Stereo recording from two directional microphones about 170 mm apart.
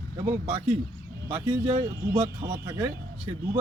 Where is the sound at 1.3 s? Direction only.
25° right (ahead or behind).